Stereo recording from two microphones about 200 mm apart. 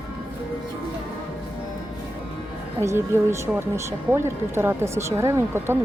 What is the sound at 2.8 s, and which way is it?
Speech, 15° right (ahead or behind).